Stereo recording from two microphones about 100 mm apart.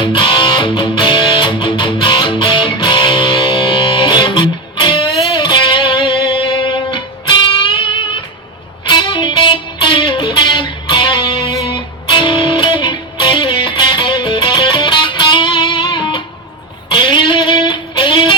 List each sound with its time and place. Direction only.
0.0 s music: 55° left (ahead or behind)